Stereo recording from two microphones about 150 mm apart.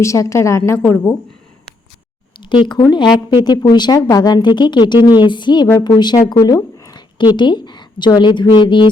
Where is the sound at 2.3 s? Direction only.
30° left (ahead or behind).